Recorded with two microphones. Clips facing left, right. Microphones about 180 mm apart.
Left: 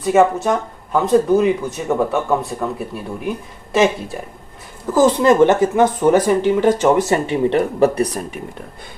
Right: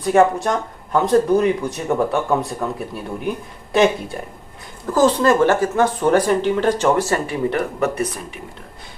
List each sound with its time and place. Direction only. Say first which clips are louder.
0.0 s speech: left 1 dB; centre (ahead or behind)
7.1 s speech: left 4 dB; 25° left (ahead or behind)